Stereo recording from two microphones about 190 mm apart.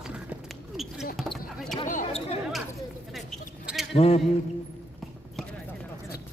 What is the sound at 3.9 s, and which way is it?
Speech, 30° left (ahead or behind).